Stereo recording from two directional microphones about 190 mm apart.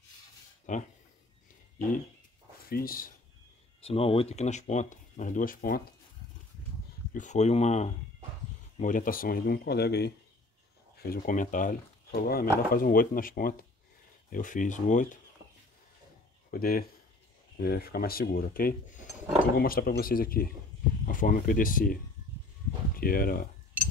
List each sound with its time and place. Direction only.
0.7 s speech: 40° left (ahead or behind)
2.7 s speech: 50° left (ahead or behind)
3.8 s speech: 30° left (ahead or behind); by 5.8 s 45° left (ahead or behind)
7.2 s speech: 40° left (ahead or behind); by 10.1 s 60° left (ahead or behind)
11.0 s speech: 50° left (ahead or behind)
16.4 s speech: 50° left (ahead or behind)
22.9 s speech: 50° left (ahead or behind)